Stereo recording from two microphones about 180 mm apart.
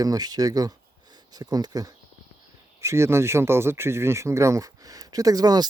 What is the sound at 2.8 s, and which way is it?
Speech, 15° right (ahead or behind).